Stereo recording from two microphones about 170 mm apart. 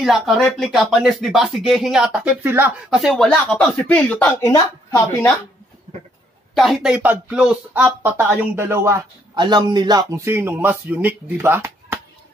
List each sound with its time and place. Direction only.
0.0 s speech: centre (ahead or behind)
2.9 s speech: centre (ahead or behind); by 5.3 s 20° left (ahead or behind)
6.5 s speech: centre (ahead or behind)